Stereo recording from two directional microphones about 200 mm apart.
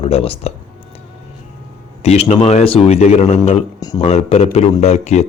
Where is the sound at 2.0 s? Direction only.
30° left (ahead or behind).